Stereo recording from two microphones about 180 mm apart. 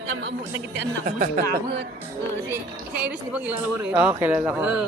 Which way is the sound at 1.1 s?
40° right (ahead or behind).